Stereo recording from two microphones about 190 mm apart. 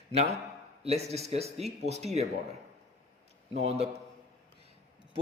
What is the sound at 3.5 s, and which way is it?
Speech, 35° right (ahead or behind).